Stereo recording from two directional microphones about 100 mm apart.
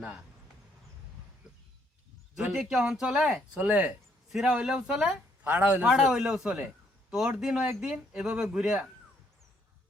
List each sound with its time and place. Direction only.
2.3 s speech: 5° right (ahead or behind)